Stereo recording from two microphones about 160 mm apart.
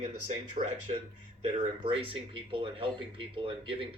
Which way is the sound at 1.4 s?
35° right (ahead or behind).